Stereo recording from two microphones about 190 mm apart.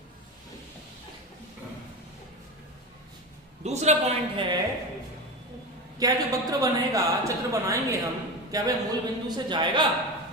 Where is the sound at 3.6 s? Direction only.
35° right (ahead or behind).